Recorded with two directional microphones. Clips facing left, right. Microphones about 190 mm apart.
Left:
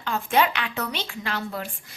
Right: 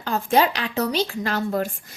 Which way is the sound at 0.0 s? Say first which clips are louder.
Right 3 dB; 40° right (ahead or behind).